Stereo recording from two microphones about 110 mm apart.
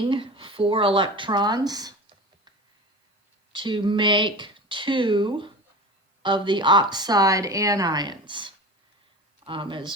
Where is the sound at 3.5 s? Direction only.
45° right (ahead or behind).